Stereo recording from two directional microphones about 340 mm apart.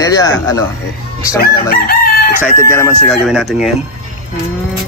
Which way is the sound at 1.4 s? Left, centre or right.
Left.